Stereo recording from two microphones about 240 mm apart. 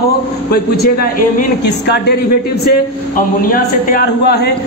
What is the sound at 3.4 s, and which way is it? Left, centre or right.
Speech, left.